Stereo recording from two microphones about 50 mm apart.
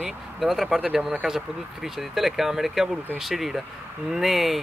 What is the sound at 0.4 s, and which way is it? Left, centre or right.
Speech, centre.